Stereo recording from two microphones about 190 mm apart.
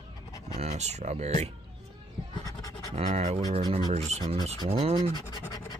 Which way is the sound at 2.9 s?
35° right (ahead or behind).